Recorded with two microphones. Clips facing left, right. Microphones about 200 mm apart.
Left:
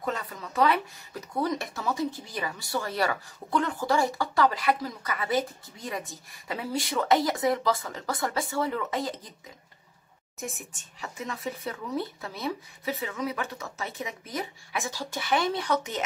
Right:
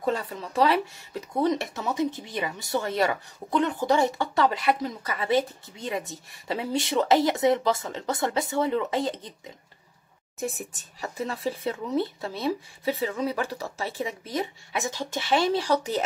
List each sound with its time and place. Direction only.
0.0 s speech: 30° right (ahead or behind)
10.4 s speech: 40° right (ahead or behind)